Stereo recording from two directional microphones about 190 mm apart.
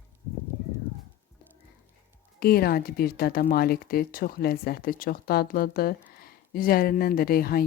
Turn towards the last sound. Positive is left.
turn(degrees=50)  # may be behind; listen again after turning